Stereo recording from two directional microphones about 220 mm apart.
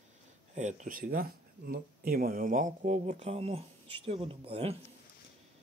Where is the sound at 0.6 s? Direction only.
35° right (ahead or behind).